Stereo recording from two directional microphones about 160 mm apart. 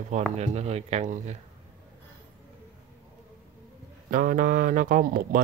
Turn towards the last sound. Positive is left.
turn(degrees=-60)  # may be behind; listen again after turning